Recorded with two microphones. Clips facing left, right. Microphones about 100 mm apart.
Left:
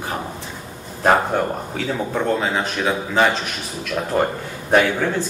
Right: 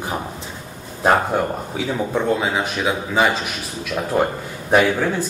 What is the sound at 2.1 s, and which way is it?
Speech, 10° right (ahead or behind).